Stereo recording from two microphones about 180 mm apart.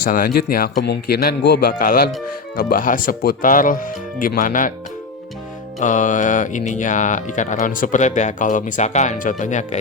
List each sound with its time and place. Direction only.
0.0 s a man's voice: 55° left (ahead or behind)
5.8 s speech: 45° left (ahead or behind)